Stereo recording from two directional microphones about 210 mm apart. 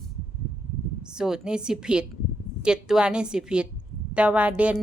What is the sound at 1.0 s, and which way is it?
A woman's voice, 5° right (ahead or behind).